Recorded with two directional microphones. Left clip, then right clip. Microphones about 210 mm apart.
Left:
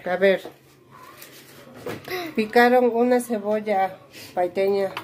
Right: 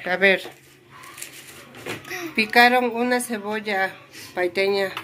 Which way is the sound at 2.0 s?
45° left (ahead or behind).